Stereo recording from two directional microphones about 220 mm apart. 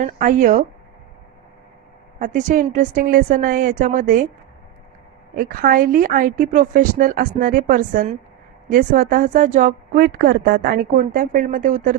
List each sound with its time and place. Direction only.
0.0 s a woman's voice: 35° right (ahead or behind)
2.1 s a woman's voice: 35° right (ahead or behind)
5.3 s a woman's voice: 40° right (ahead or behind)